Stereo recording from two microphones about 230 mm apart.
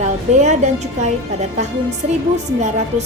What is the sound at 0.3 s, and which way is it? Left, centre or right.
A woman's voice, right.